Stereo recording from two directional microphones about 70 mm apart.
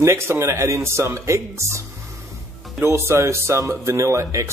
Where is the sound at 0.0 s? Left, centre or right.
Right.